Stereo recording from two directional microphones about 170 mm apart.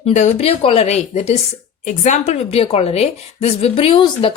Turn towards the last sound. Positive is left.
turn(degrees=30)  # may be behind; listen again after turning